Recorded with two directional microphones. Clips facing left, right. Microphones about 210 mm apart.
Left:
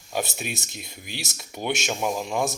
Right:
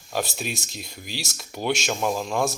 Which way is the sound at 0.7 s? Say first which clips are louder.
Right 2 dB; 55° left (ahead or behind).